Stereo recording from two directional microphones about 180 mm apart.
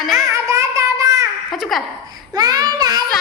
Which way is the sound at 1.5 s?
Centre (ahead or behind).